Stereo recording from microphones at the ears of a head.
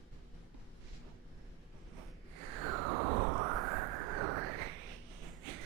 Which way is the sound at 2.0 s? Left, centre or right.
Right.